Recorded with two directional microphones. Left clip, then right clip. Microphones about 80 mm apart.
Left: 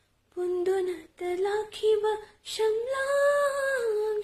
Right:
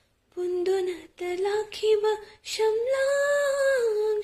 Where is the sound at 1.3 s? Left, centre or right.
Left.